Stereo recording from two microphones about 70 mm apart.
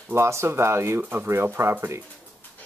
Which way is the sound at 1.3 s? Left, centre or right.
Right.